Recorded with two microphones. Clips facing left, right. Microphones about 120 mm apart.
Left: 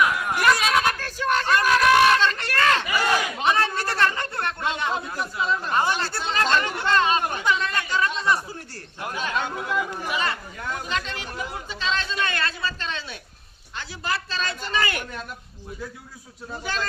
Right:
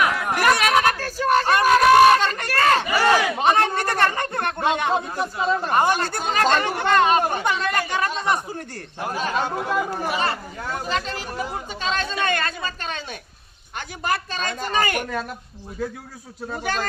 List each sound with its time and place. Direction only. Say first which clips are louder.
0.1 s chatter: right 2 dB; 40° right (ahead or behind)
0.3 s a sound: right 2 dB; 65° right (ahead or behind)
0.9 s a sound: right 4 dB; 40° right (ahead or behind)
4.4 s a man's voice: right 6 dB; 55° right (ahead or behind)
7.2 s a man's voice: right 5 dB; 40° right (ahead or behind)
7.7 s a man's voice: right 2 dB; 55° right (ahead or behind)
9.0 s a man's voice: right 3 dB; 40° right (ahead or behind)
16.5 s speech: right 4 dB; 55° right (ahead or behind)